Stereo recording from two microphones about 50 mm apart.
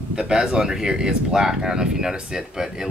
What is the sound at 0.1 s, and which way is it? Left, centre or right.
Speech, centre.